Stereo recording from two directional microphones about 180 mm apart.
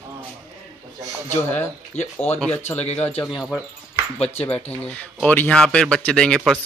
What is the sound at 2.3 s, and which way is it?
Speech, 10° left (ahead or behind).